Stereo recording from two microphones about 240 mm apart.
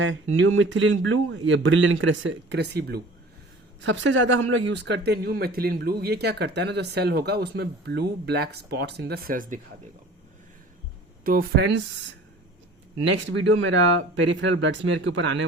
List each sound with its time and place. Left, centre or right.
0.0 s speech: right
11.2 s speech: right
13.1 s speech: right